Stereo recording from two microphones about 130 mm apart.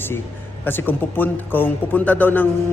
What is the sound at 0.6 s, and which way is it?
A man's voice, 15° left (ahead or behind).